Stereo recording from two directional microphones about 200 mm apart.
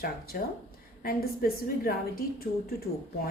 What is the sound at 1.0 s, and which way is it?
Speech, 50° left (ahead or behind).